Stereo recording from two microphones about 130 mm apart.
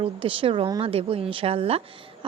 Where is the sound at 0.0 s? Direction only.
45° right (ahead or behind).